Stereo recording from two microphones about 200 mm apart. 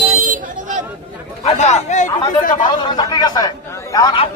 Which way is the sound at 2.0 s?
20° left (ahead or behind).